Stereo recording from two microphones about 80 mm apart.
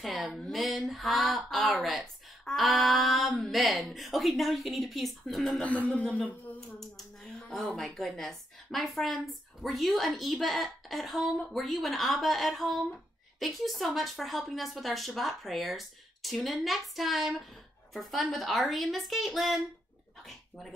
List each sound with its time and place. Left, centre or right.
0.0 s a woman's voice: centre
5.6 s speech: centre
7.5 s a woman's voice: centre
20.2 s dog: centre